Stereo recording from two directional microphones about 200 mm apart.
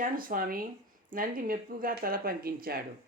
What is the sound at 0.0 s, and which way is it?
Speech, 45° right (ahead or behind).